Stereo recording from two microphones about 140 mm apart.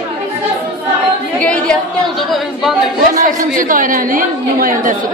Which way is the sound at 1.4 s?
10° left (ahead or behind).